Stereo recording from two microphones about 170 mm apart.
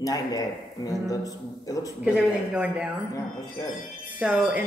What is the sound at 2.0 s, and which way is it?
Speech, 5° right (ahead or behind).